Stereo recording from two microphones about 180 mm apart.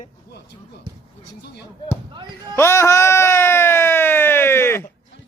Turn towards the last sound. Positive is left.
turn(degrees=15)  # may be behind; listen again after turning